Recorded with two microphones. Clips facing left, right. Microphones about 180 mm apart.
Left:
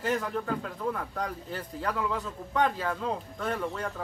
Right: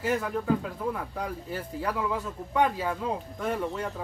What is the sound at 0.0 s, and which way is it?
Speech, 10° right (ahead or behind).